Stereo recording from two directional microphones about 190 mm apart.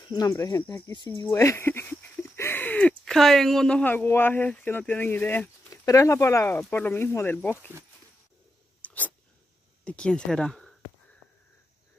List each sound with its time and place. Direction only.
0.0 s speech: 20° left (ahead or behind)
8.8 s a sound: 10° left (ahead or behind)
9.8 s speech: 5° left (ahead or behind)